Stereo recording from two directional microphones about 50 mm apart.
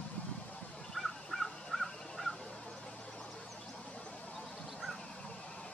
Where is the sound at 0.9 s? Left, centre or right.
Centre.